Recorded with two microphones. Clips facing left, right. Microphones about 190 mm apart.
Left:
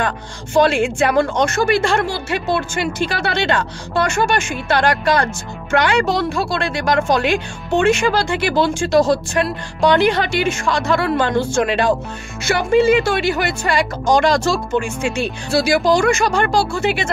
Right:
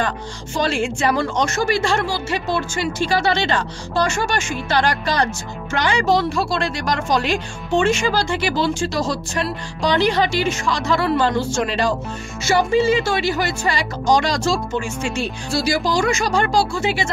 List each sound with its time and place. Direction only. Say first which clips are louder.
0.6 s a woman's voice: left 6 dB; 55° left (ahead or behind)